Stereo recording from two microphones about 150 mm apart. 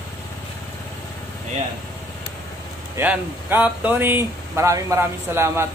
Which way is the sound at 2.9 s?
10° right (ahead or behind).